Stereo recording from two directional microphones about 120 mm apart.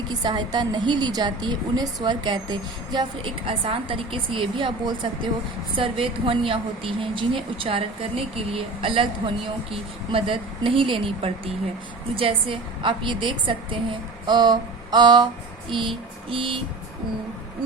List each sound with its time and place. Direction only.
0.1 s a woman's voice: 35° right (ahead or behind)
14.3 s a sound: 35° right (ahead or behind)
15.7 s a woman's voice: 45° right (ahead or behind)